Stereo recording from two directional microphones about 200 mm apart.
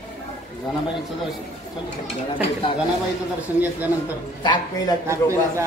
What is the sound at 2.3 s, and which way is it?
Speech, 25° left (ahead or behind).